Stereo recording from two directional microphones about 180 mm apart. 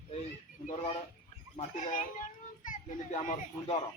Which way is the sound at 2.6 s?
45° left (ahead or behind).